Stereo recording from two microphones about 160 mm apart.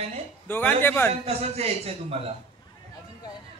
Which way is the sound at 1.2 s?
40° right (ahead or behind).